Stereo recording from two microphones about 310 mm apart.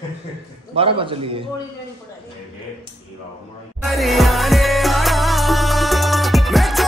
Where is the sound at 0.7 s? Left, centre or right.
Centre.